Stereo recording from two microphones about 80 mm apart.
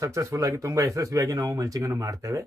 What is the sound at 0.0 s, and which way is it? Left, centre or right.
Speech, right.